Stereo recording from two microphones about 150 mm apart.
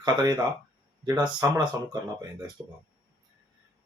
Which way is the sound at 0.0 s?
25° right (ahead or behind).